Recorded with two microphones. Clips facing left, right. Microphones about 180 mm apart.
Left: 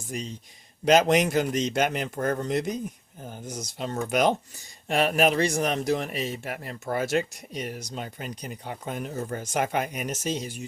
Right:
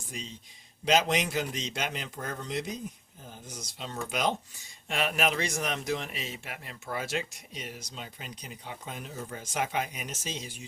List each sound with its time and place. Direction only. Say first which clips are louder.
0.9 s speech: left 7 dB; 55° left (ahead or behind)
3.4 s speech: left 9 dB; 40° left (ahead or behind)
4.9 s speech: left 7 dB; 40° left (ahead or behind)